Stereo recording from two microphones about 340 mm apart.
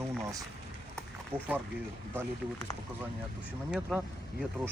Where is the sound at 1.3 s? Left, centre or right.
Centre.